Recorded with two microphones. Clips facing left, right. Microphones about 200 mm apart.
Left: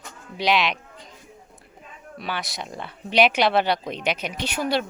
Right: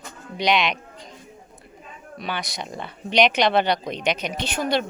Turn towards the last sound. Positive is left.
turn(degrees=5)  # may be behind; listen again after turning